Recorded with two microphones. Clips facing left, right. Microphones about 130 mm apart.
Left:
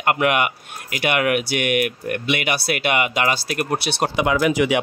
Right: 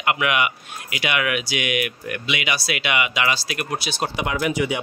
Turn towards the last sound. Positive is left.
turn(degrees=90)